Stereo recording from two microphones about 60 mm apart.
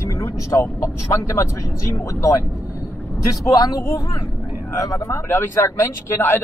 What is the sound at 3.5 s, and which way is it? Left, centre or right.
A man's voice, left.